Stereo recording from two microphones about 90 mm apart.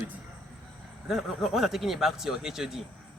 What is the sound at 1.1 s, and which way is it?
Speech, 5° right (ahead or behind).